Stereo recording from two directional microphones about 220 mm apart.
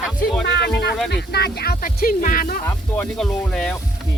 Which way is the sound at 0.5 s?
50° left (ahead or behind).